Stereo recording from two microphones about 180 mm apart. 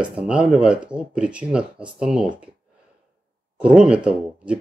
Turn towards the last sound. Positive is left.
turn(degrees=-5)  # may be behind; listen again after turning